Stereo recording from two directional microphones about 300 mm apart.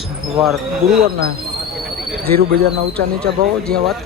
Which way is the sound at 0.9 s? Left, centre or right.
Right.